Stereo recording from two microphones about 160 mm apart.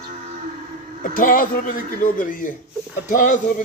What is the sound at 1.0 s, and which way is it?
A man's voice, 60° left (ahead or behind).